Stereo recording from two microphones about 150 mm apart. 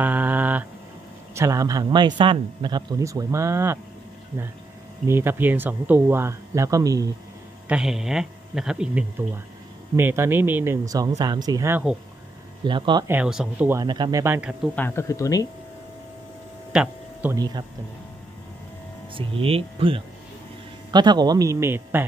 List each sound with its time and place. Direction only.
0.0 s a sound: 10° right (ahead or behind)
1.3 s speech: 20° right (ahead or behind)
5.0 s speech: 15° right (ahead or behind)
7.6 s a man's voice: 5° right (ahead or behind)
9.9 s speech: 15° right (ahead or behind)
12.6 s speech: 30° right (ahead or behind)
13.0 s speech: 15° right (ahead or behind)
13.8 s speech: 30° right (ahead or behind)
14.2 s speech: 15° right (ahead or behind)
14.8 s speech: 15° left (ahead or behind)
16.7 s a sound: 5° right (ahead or behind)
17.3 s speech: 25° right (ahead or behind)
19.1 s speech: 35° right (ahead or behind); by 22.0 s 15° right (ahead or behind)